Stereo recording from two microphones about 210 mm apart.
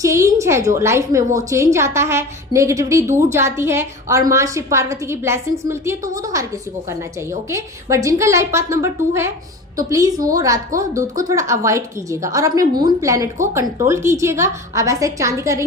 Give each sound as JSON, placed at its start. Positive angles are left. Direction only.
{"t": 0.0, "sound": "a woman's voice", "side_deg": -15}